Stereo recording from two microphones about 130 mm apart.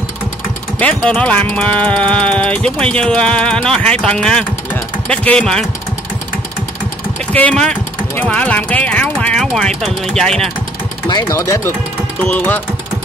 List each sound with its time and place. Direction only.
0.7 s speech: 10° left (ahead or behind)
7.3 s speech: 10° left (ahead or behind)
11.1 s speech: 35° left (ahead or behind)
11.3 s speech: 20° left (ahead or behind)